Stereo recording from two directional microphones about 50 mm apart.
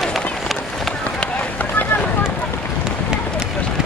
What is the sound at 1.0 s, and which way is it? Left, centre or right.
Run, left.